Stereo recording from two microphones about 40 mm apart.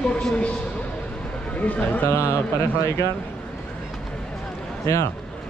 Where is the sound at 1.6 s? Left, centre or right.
Left.